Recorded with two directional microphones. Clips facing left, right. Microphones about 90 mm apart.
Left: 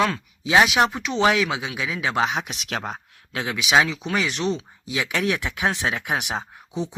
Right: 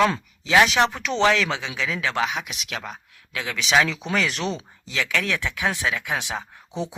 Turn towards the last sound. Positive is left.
turn(degrees=0)  # may be behind; listen again after turning